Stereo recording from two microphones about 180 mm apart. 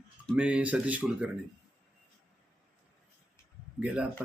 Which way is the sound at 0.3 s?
5° right (ahead or behind).